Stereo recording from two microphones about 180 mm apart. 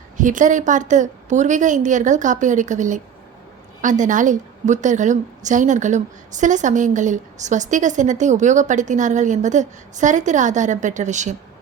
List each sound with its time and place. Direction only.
0.2 s a woman's voice: 45° right (ahead or behind)